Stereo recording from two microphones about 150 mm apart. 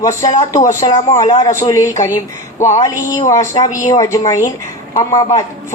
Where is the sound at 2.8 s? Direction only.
20° left (ahead or behind).